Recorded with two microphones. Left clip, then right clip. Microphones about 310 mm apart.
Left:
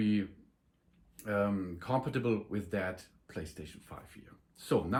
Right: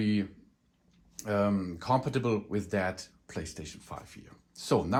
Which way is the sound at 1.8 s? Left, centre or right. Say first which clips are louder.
Right 5 dB; centre.